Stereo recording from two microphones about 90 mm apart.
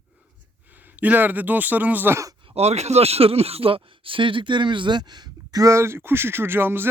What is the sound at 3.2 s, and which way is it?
Speech, 90° right.